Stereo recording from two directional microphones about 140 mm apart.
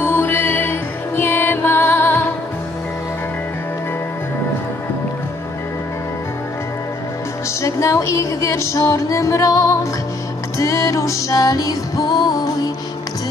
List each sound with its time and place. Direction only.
0.0 s music: 15° left (ahead or behind)
7.6 s music: 20° left (ahead or behind)